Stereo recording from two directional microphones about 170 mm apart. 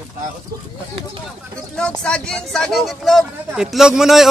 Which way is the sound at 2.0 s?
5° left (ahead or behind).